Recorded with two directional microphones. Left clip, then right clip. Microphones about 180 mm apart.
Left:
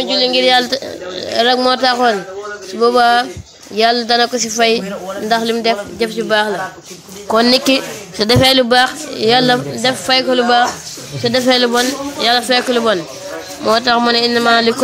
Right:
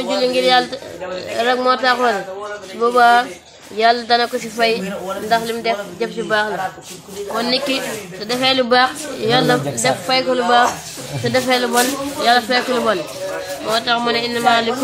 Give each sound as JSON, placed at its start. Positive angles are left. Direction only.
{"t": 0.0, "sound": "a sound", "side_deg": 5}
{"t": 0.3, "sound": "a woman's voice", "side_deg": 30}
{"t": 7.3, "sound": "a woman's voice", "side_deg": 65}
{"t": 8.6, "sound": "a woman's voice", "side_deg": 25}
{"t": 13.7, "sound": "speech", "side_deg": 55}